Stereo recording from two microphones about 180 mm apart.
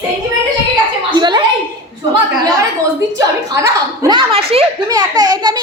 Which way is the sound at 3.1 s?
20° right (ahead or behind).